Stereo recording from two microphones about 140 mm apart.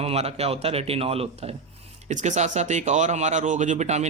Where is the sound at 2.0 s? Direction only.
55° right (ahead or behind).